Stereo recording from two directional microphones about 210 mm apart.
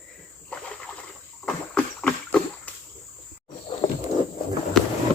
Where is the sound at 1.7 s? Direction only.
5° left (ahead or behind).